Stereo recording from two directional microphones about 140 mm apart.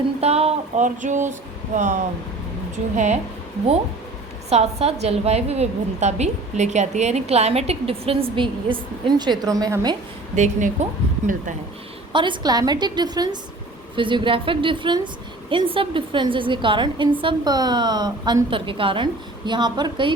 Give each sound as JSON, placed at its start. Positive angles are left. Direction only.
{"t": 0.2, "sound": "a woman's voice", "side_deg": -45}
{"t": 1.0, "sound": "a woman's voice", "side_deg": -60}
{"t": 4.4, "sound": "a woman's voice", "side_deg": -50}
{"t": 10.3, "sound": "a woman's voice", "side_deg": -60}
{"t": 12.1, "sound": "a woman's voice", "side_deg": -35}